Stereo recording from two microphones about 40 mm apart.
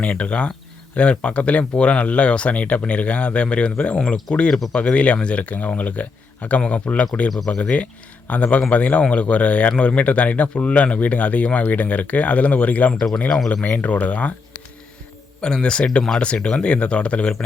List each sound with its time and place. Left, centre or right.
0.0 s speech: left
4.7 s speech: left
15.4 s a man's voice: centre